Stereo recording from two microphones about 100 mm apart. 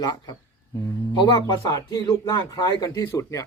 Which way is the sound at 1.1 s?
45° left (ahead or behind).